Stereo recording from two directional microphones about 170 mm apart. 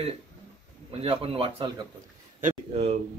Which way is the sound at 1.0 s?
35° right (ahead or behind).